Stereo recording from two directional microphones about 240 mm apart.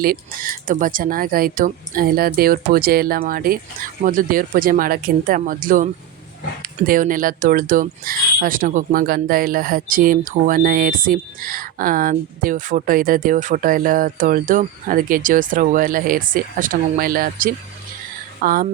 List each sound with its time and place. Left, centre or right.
0.0 s speech: right